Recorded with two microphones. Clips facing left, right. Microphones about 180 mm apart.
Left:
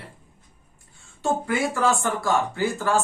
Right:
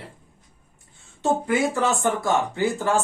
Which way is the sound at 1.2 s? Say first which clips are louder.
Right 2 dB; 20° right (ahead or behind).